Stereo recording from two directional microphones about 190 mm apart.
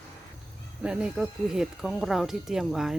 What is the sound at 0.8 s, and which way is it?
Speech, 5° right (ahead or behind).